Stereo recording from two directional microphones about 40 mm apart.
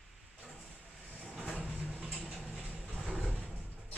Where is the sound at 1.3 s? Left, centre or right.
Centre.